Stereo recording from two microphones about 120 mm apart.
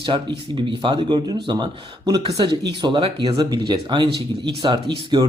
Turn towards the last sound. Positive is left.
turn(degrees=-40)  # may be behind; listen again after turning